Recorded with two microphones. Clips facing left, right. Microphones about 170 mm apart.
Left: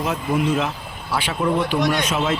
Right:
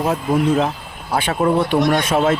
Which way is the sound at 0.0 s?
35° right (ahead or behind).